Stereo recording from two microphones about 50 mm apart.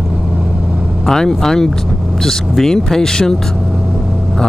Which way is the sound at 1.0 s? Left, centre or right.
Centre.